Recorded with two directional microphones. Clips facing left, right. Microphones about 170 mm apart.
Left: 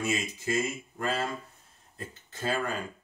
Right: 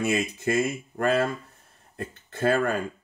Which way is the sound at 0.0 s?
60° right (ahead or behind).